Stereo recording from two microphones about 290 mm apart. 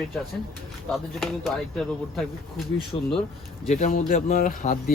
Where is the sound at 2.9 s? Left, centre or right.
Centre.